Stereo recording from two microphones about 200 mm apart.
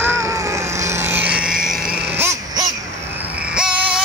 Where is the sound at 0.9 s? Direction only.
10° right (ahead or behind).